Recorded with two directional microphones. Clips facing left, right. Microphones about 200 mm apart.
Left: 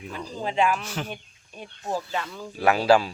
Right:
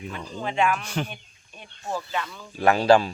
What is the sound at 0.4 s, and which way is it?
Speech, 35° left (ahead or behind).